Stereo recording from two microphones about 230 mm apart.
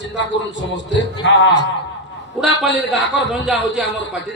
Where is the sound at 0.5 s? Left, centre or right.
Left.